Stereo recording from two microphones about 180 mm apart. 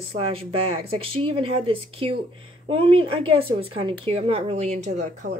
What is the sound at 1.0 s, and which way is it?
Speech, 30° right (ahead or behind).